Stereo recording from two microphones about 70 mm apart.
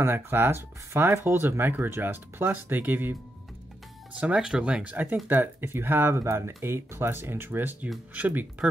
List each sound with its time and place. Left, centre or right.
0.0 s speech: right
4.2 s speech: centre